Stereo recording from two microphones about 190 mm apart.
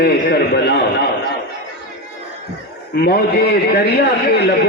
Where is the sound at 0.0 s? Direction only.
60° left (ahead or behind).